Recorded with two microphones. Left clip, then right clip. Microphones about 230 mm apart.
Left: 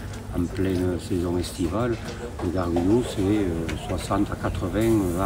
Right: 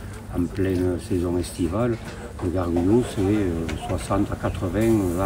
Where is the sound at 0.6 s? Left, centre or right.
Centre.